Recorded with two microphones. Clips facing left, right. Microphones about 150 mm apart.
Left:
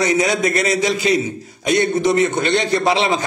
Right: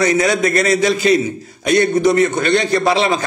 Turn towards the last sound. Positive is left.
turn(degrees=20)  # may be behind; listen again after turning